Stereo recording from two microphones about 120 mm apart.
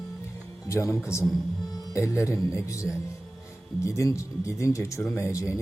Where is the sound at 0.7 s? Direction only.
20° left (ahead or behind).